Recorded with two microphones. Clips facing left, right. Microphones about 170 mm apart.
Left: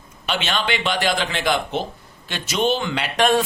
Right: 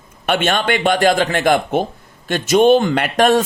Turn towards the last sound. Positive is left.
turn(degrees=-45)  # may be behind; listen again after turning